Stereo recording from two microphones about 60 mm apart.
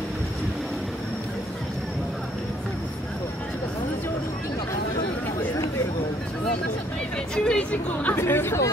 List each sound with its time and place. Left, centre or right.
7.3 s chatter: centre
8.2 s speech: left